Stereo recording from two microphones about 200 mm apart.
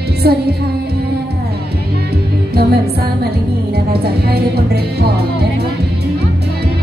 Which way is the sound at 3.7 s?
50° right (ahead or behind).